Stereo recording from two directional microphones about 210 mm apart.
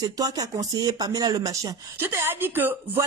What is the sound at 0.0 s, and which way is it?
Speech, 15° right (ahead or behind).